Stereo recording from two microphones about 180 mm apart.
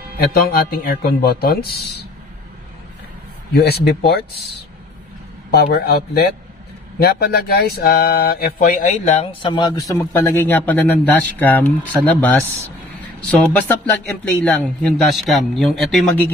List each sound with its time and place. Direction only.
0.3 s speech: 55° left (ahead or behind)
3.5 s speech: 60° left (ahead or behind)
5.5 s speech: 60° left (ahead or behind); by 9.3 s 40° left (ahead or behind)
9.4 s a man's voice: 25° left (ahead or behind); by 16.0 s centre (ahead or behind)